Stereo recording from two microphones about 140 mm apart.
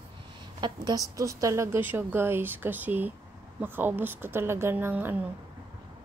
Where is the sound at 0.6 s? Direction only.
35° right (ahead or behind).